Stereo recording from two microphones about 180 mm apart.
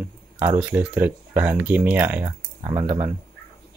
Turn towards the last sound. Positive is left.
turn(degrees=-15)  # may be behind; listen again after turning